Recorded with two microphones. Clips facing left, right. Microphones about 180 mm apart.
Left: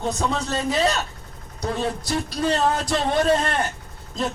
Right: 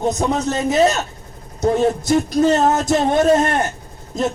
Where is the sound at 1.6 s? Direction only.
45° right (ahead or behind).